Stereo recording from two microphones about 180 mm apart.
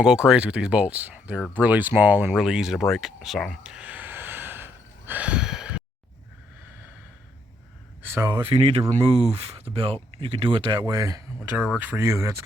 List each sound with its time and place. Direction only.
0.0 s speech: 5° right (ahead or behind)
8.0 s speech: 15° right (ahead or behind)
8.4 s speech: 30° right (ahead or behind); by 12.3 s 15° right (ahead or behind)